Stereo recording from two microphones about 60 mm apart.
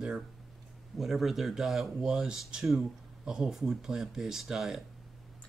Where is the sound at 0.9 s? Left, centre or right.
Centre.